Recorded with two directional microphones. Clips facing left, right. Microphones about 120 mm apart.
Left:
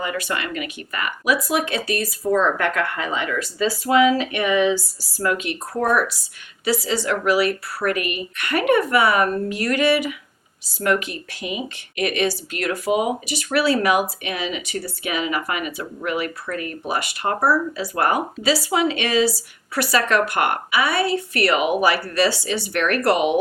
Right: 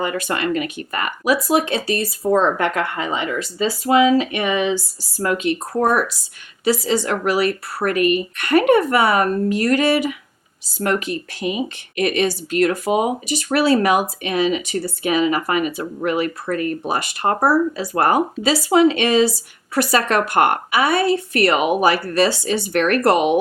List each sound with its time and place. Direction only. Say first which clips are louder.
0.0 s speech: right 4 dB; 35° right (ahead or behind)
18.9 s speech: right 4 dB; 25° right (ahead or behind)
19.7 s speech: right 2 dB; 40° right (ahead or behind)